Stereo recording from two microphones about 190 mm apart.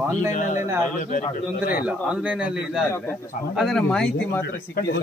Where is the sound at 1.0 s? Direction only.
45° left (ahead or behind).